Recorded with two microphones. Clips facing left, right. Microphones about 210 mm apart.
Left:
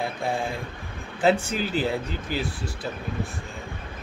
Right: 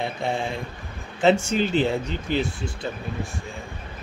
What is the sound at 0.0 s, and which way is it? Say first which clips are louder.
Speech: right 1 dB; centre (ahead or behind).